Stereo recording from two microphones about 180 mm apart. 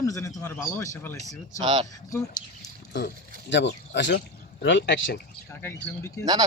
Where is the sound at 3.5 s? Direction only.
80° left.